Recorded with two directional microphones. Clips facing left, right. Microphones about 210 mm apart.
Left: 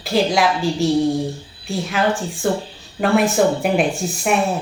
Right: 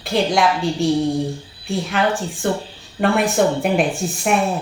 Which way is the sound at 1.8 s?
Centre (ahead or behind).